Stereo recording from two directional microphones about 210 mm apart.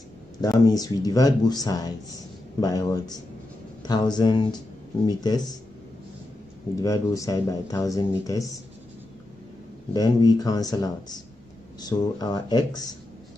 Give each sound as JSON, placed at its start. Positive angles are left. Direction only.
{"t": 0.4, "sound": "speech", "side_deg": 20}
{"t": 6.7, "sound": "speech", "side_deg": 15}
{"t": 9.9, "sound": "speech", "side_deg": 20}